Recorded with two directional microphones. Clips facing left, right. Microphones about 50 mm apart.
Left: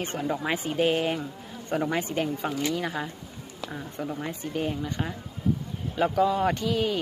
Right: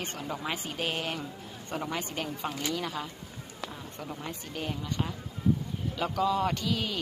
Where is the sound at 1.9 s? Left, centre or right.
Left.